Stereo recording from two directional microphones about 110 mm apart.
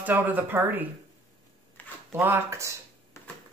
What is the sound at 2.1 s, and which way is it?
Speech, 20° right (ahead or behind).